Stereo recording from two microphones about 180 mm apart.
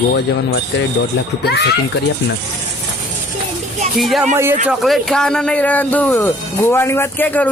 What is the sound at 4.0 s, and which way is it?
Speech, centre (ahead or behind).